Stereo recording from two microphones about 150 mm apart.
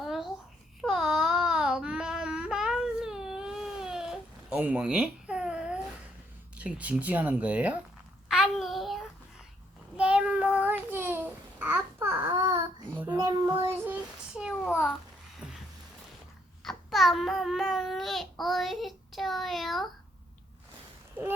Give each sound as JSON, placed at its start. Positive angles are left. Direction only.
{"t": 0.0, "sound": "babbling", "side_deg": 0}
{"t": 0.8, "sound": "child singing", "side_deg": 0}
{"t": 6.6, "sound": "speech", "side_deg": -10}
{"t": 8.3, "sound": "child singing", "side_deg": 0}
{"t": 10.0, "sound": "babbling", "side_deg": -5}
{"t": 13.0, "sound": "child singing", "side_deg": -15}
{"t": 15.4, "sound": "a sound", "side_deg": -10}
{"t": 16.6, "sound": "babbling", "side_deg": 0}